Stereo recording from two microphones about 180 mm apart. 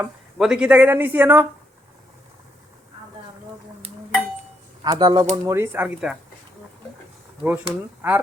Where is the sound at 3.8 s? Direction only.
35° right (ahead or behind).